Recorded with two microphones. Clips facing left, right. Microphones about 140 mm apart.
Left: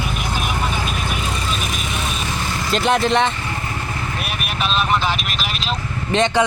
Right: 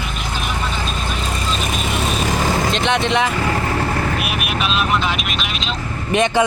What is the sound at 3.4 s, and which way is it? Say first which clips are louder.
Vehicle: right 8 dB; 85° right.